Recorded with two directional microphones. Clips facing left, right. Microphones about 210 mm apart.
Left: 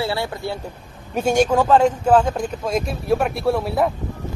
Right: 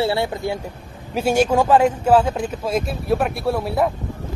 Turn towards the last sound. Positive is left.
turn(degrees=0)  # may be behind; listen again after turning